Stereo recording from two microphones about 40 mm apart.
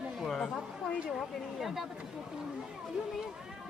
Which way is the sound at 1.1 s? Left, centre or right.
Centre.